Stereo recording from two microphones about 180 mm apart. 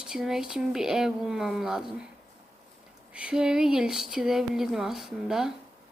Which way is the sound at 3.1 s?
5° right (ahead or behind).